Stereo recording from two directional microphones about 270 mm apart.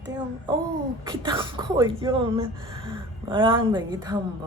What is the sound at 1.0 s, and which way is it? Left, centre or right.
Speech, centre.